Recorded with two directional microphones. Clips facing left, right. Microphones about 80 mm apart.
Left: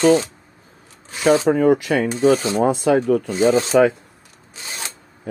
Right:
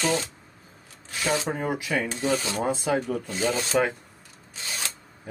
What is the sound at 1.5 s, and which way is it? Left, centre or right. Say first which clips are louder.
Speech: left 12 dB; left.